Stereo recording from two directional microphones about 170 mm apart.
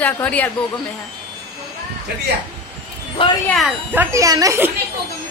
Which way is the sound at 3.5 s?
Centre (ahead or behind).